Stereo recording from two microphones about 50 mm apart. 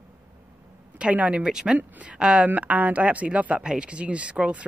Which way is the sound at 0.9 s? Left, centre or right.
Right.